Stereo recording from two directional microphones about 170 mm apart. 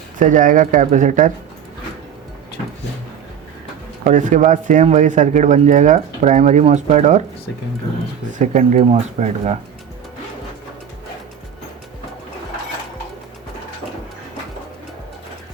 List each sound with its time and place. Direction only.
0.2 s speech: 50° right (ahead or behind)
4.0 s speech: 50° right (ahead or behind)
8.4 s speech: 45° right (ahead or behind)